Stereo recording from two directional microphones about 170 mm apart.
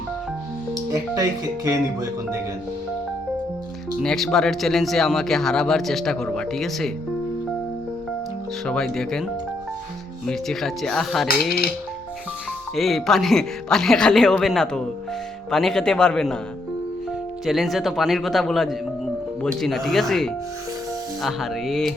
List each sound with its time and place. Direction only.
0.7 s speech: 20° right (ahead or behind)
4.0 s speech: centre (ahead or behind)
8.6 s speech: 5° left (ahead or behind)
10.2 s speech: centre (ahead or behind)
12.7 s speech: centre (ahead or behind)
17.4 s speech: centre (ahead or behind)